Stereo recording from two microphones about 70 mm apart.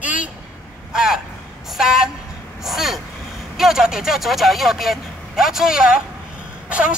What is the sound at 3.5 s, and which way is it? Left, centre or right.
Speech, centre.